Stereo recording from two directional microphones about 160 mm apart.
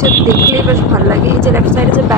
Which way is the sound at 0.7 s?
15° right (ahead or behind).